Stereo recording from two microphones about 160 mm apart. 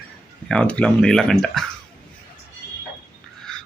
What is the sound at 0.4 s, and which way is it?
Speech, 5° left (ahead or behind).